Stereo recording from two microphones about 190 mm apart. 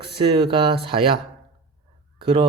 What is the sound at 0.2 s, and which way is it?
Speech, 25° right (ahead or behind).